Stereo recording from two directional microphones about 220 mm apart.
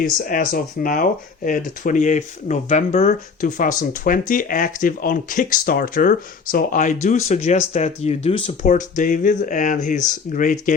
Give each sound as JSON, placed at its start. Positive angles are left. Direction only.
{"t": 0.0, "sound": "speech", "side_deg": 40}